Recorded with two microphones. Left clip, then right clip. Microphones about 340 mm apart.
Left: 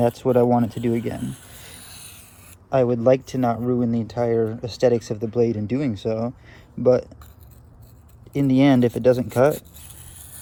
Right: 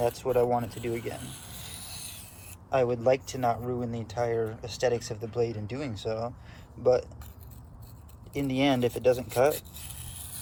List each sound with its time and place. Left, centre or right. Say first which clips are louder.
0.2 s speech: left 7 dB; left
0.8 s speech: left 9 dB; left
1.8 s a sound: even; centre
2.6 s speech: left 7 dB; left
8.3 s speech: left 8 dB; left